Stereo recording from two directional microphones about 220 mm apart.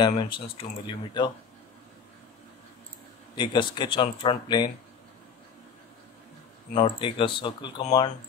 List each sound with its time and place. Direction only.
0.0 s speech: 20° left (ahead or behind)
3.3 s speech: 20° left (ahead or behind)
6.7 s speech: 25° left (ahead or behind)